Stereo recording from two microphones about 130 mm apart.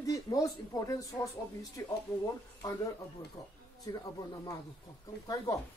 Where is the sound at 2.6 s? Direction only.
25° left (ahead or behind).